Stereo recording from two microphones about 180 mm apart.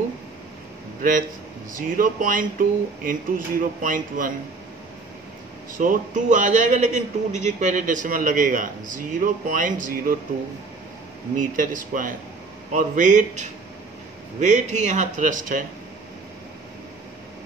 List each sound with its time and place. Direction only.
1.8 s a man's voice: 50° right (ahead or behind)
5.8 s a man's voice: 45° right (ahead or behind)
11.3 s a man's voice: 45° right (ahead or behind)